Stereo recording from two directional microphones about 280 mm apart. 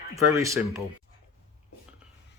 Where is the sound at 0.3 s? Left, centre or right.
Centre.